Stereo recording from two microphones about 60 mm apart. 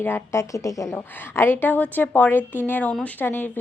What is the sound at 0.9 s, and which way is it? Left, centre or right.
A woman's voice, left.